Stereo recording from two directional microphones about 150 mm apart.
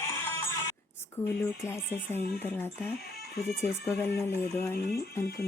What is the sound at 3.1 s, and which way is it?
Speech, 90° left.